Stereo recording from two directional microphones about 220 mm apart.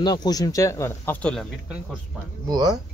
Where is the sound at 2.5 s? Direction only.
15° right (ahead or behind).